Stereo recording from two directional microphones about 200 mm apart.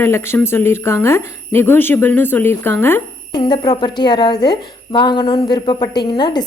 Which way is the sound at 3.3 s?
20° left (ahead or behind).